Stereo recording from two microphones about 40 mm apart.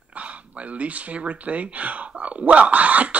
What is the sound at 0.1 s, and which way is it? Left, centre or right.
Speech, right.